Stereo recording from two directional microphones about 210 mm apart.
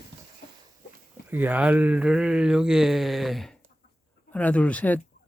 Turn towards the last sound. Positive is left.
turn(degrees=5)  # may be behind; listen again after turning